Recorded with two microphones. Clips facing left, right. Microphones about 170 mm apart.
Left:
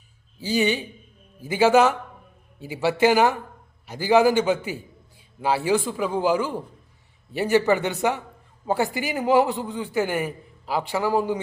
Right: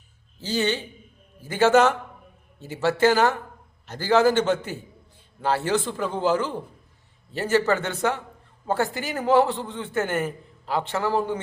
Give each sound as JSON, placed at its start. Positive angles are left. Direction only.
{"t": 0.3, "sound": "a man's voice", "side_deg": 15}